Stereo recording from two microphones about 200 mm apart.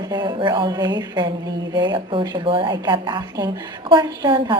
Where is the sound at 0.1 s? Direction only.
20° right (ahead or behind).